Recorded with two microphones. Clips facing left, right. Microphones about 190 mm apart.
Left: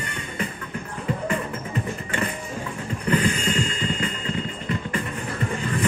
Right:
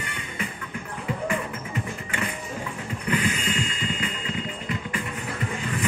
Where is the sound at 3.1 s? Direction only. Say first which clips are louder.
Left 4 dB; 40° left (ahead or behind).